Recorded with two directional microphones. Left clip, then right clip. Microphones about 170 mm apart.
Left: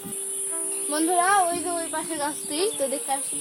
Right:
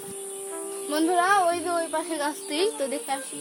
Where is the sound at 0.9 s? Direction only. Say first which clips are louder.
Even; 20° right (ahead or behind).